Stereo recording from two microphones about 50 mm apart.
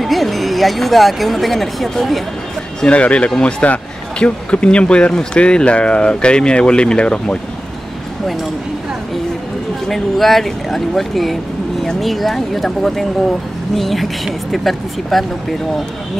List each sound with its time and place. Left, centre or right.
0.0 s a woman's voice: centre
2.9 s a man's voice: left
9.8 s speech: centre